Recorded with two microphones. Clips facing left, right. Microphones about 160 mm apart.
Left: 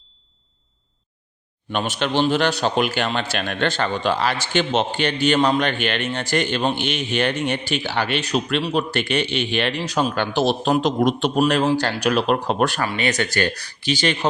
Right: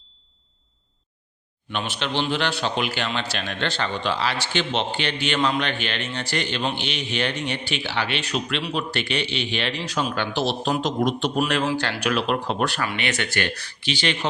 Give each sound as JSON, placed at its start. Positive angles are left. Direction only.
{"t": 1.7, "sound": "a man's voice", "side_deg": 45}
{"t": 11.3, "sound": "speech", "side_deg": 40}